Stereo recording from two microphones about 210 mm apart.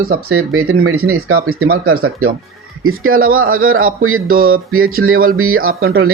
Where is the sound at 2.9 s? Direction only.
80° right.